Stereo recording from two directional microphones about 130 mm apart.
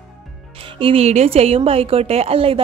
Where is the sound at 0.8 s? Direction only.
45° right (ahead or behind).